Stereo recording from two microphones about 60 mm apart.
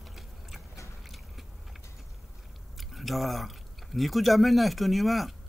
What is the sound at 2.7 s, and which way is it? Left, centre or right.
Chewing, centre.